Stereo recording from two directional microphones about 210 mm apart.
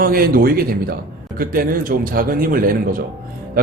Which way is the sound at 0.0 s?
45° right (ahead or behind).